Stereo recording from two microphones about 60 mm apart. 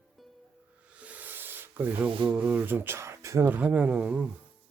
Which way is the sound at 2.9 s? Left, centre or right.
Right.